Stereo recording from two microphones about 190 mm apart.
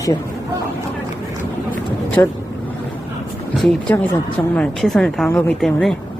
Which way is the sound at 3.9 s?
15° left (ahead or behind).